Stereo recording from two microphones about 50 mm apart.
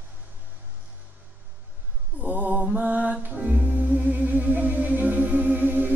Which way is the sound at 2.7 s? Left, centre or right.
Right.